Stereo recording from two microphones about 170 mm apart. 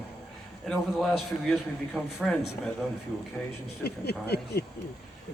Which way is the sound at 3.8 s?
75° left (ahead or behind).